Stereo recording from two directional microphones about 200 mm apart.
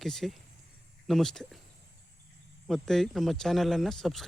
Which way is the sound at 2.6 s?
Centre (ahead or behind).